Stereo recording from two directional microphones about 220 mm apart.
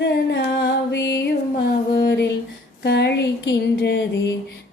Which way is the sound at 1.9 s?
45° left (ahead or behind).